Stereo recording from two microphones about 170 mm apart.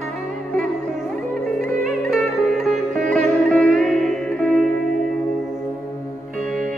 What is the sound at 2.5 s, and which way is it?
Music, centre (ahead or behind).